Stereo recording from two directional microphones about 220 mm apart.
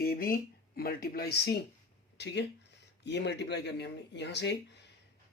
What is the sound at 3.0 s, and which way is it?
Speech, 50° left (ahead or behind).